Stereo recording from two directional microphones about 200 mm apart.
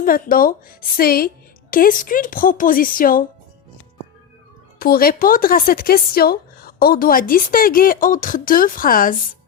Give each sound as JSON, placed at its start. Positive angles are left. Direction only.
{"t": 0.0, "sound": "speech", "side_deg": 45}
{"t": 4.8, "sound": "speech", "side_deg": 50}